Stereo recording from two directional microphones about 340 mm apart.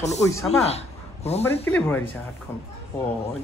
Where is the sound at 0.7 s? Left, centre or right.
Centre.